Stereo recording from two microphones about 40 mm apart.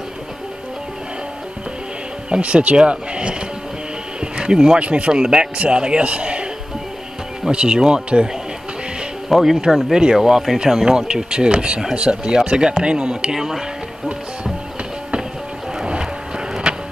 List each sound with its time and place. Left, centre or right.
2.2 s speech: right
4.2 s music: right
4.7 s speech: right
7.4 s speech: right
9.3 s speech: centre
16.6 s vehicle: centre